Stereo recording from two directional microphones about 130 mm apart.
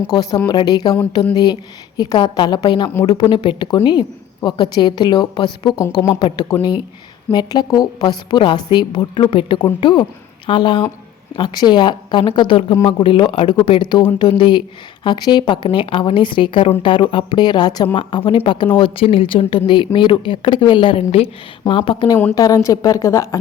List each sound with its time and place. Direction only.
0.1 s speech: 30° left (ahead or behind)
2.0 s a woman's voice: 30° left (ahead or behind)
6.1 s a woman's voice: 35° left (ahead or behind)
22.4 s a woman's voice: 25° left (ahead or behind)